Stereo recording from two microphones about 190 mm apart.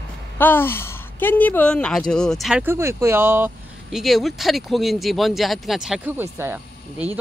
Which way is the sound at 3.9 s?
Centre (ahead or behind).